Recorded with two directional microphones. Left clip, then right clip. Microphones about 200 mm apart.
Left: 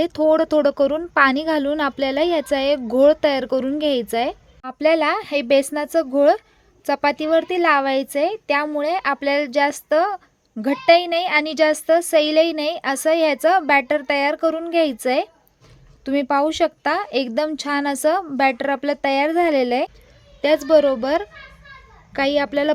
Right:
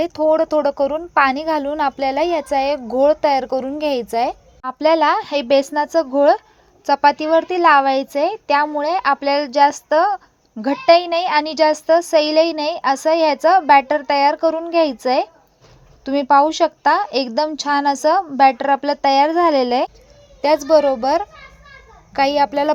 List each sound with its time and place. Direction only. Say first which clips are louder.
0.0 s a woman's voice: right 1 dB; 45° left (ahead or behind)
4.6 s a child's voice: right 3 dB; 10° left (ahead or behind)
20.4 s a woman's voice: right 1 dB; 35° left (ahead or behind)